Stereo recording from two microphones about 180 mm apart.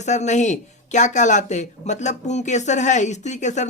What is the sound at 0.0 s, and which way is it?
Speech, 40° left (ahead or behind).